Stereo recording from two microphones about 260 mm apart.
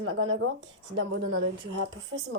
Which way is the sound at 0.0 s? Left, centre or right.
Right.